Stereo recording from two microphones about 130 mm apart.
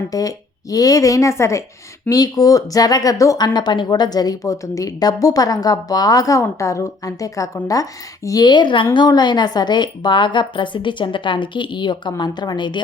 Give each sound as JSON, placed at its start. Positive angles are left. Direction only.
{"t": 0.1, "sound": "a woman's voice", "side_deg": 30}